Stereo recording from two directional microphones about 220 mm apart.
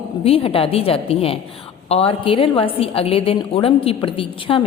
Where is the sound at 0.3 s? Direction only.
25° left (ahead or behind).